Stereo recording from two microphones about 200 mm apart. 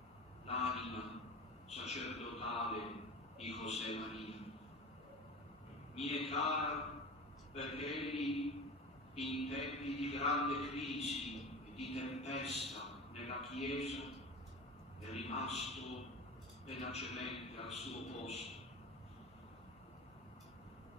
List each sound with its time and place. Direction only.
0.5 s a sound: 30° left (ahead or behind)
1.7 s speech: 30° left (ahead or behind)
3.3 s mantra: 30° left (ahead or behind)
5.9 s mantra: 30° left (ahead or behind)
13.1 s a sound: 30° left (ahead or behind)
13.5 s mantra: 30° left (ahead or behind)
15.0 s mantra: 30° left (ahead or behind)